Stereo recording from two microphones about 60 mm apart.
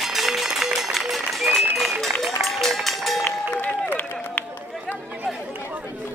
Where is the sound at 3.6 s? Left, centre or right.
Left.